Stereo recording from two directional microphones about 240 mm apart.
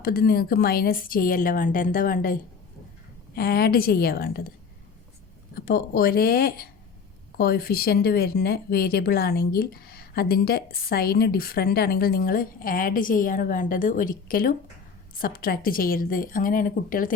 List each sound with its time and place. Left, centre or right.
0.0 s speech: left
5.5 s speech: left